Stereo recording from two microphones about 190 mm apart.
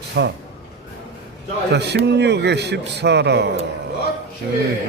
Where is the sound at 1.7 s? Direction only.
60° right (ahead or behind).